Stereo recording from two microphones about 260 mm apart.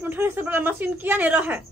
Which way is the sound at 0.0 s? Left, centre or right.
Centre.